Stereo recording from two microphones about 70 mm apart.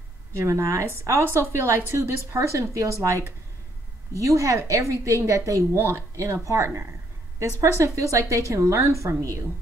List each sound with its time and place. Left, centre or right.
0.4 s a woman's voice: right